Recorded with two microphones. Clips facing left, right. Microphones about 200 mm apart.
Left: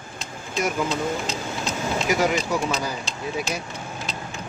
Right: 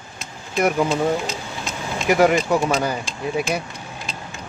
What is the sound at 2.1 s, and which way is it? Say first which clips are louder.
Speech: right 7 dB; 55° right (ahead or behind).